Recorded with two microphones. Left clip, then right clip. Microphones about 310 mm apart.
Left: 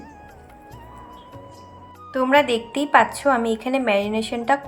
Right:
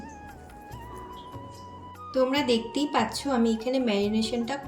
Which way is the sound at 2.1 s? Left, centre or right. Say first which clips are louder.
Left 8 dB; centre.